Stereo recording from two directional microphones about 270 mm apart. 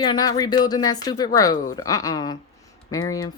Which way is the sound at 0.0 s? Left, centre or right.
Centre.